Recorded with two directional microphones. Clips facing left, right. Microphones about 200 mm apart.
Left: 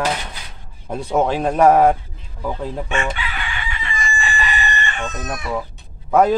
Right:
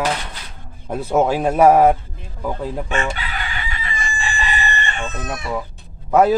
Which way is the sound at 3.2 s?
40° right (ahead or behind).